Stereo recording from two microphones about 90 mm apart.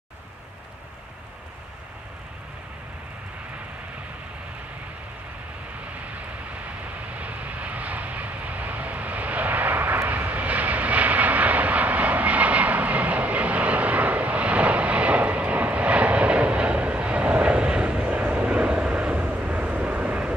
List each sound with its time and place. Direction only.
7.2 s vehicle: 15° right (ahead or behind)